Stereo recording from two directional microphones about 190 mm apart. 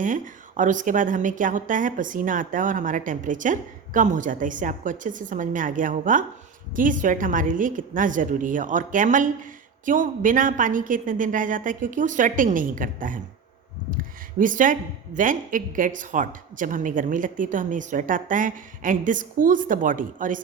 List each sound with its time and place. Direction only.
0.0 s a woman's voice: 45° right (ahead or behind)